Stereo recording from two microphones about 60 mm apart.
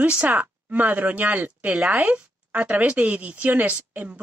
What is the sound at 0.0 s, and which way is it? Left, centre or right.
A woman's voice, right.